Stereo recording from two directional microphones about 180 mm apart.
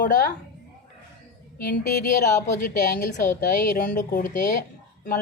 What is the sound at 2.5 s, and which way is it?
A woman's voice, 45° left (ahead or behind).